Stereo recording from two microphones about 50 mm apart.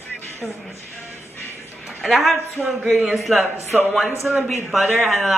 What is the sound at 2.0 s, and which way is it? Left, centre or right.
A man's voice, centre.